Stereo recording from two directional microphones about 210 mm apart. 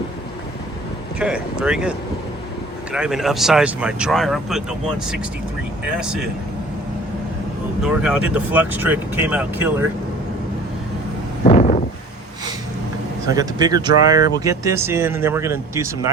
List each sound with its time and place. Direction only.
1.2 s speech: 5° right (ahead or behind)
5.9 s speech: 5° right (ahead or behind)
7.8 s speech: 5° right (ahead or behind)
11.4 s a sound: 35° left (ahead or behind)
13.2 s speech: 15° right (ahead or behind)